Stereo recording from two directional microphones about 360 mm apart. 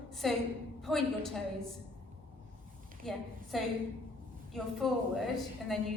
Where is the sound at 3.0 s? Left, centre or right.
Centre.